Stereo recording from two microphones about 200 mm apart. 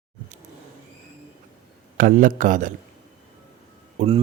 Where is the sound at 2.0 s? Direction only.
40° right (ahead or behind).